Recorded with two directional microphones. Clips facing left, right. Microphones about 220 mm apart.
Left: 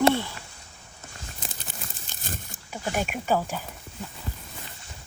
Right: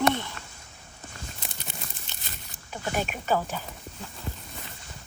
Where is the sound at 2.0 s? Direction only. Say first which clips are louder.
Left 7 dB; 50° left (ahead or behind).